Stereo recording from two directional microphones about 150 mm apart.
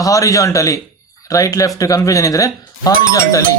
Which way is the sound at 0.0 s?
20° left (ahead or behind).